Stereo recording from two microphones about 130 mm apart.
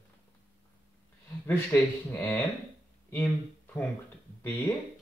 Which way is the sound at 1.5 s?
15° left (ahead or behind).